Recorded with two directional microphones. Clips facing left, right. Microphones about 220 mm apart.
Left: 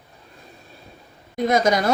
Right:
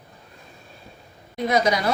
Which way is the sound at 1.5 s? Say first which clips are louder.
Left 2 dB; 45° left (ahead or behind).